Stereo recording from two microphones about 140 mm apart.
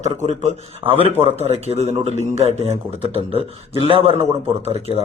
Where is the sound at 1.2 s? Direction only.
45° right (ahead or behind).